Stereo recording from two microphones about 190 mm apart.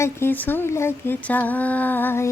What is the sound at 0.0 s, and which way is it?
Female singing, 10° left (ahead or behind).